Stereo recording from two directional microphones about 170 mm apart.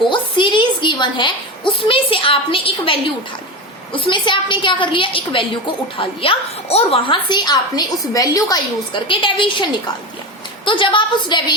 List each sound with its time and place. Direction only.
0.1 s a sound: 30° left (ahead or behind)
1.7 s a woman's voice: 30° left (ahead or behind)
10.7 s a woman's voice: 30° left (ahead or behind)